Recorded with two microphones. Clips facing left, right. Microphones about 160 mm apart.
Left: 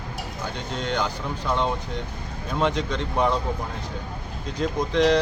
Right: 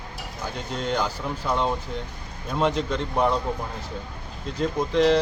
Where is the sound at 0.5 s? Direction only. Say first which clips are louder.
Right 1 dB; 5° right (ahead or behind).